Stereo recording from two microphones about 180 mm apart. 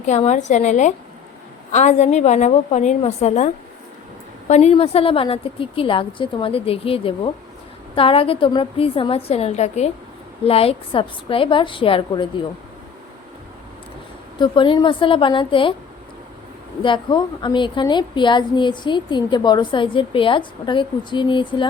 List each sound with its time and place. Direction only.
0.0 s a woman's voice: 40° left (ahead or behind)
14.3 s a woman's voice: 25° left (ahead or behind)
16.8 s a woman's voice: 25° left (ahead or behind)